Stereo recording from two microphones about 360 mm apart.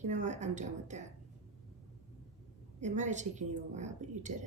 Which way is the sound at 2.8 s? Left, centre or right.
Centre.